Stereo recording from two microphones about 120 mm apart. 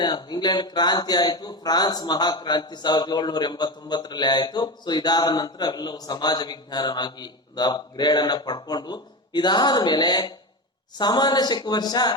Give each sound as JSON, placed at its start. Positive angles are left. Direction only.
{"t": 0.0, "sound": "speech", "side_deg": 35}